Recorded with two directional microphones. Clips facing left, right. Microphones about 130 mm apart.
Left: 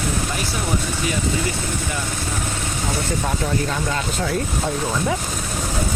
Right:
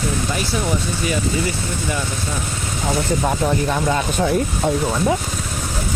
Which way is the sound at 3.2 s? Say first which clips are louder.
Right 4 dB; 20° right (ahead or behind).